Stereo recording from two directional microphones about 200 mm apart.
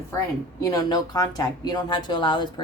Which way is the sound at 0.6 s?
20° left (ahead or behind).